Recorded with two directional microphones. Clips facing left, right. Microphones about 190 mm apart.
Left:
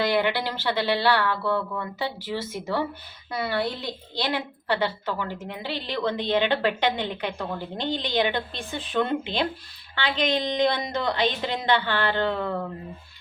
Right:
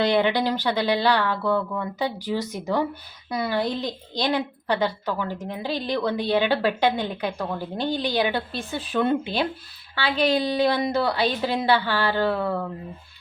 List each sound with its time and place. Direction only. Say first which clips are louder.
0.1 s a woman's voice: right 3 dB; 20° right (ahead or behind)